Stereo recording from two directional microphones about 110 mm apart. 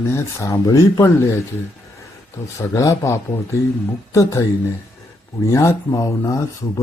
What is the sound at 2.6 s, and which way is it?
Speech, 30° left (ahead or behind).